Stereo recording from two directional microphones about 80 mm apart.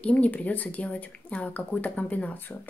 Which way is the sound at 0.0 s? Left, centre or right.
Centre.